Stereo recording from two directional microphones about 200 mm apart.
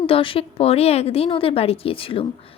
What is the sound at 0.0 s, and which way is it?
A woman's voice, 25° left (ahead or behind).